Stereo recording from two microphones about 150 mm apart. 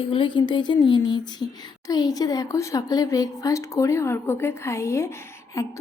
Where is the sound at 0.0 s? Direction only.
35° left (ahead or behind).